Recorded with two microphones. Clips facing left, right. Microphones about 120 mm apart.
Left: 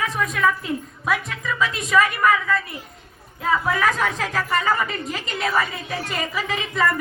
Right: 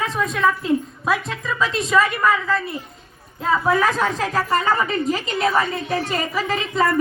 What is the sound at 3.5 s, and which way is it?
A woman's voice, 30° right (ahead or behind).